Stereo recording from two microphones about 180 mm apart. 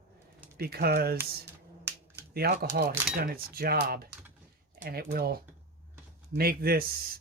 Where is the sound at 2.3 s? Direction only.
60° right (ahead or behind).